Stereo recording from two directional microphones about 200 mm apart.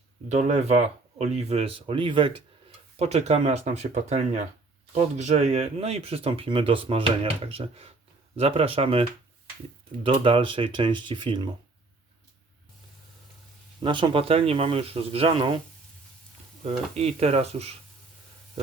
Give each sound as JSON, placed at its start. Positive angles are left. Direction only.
{"t": 0.3, "sound": "speech", "side_deg": -35}
{"t": 13.8, "sound": "speech", "side_deg": -25}
{"t": 16.9, "sound": "speech", "side_deg": -30}